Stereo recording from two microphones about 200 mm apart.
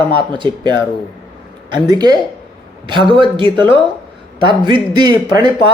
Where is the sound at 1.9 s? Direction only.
20° right (ahead or behind).